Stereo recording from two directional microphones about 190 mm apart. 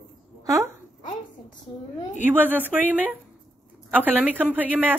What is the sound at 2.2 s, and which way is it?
Speech, 10° right (ahead or behind).